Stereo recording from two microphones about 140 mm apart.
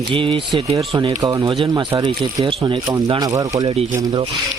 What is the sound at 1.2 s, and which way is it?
Speech, 25° right (ahead or behind).